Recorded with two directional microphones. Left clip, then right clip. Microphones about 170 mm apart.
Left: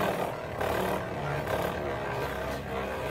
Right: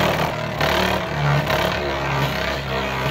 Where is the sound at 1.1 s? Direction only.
35° right (ahead or behind).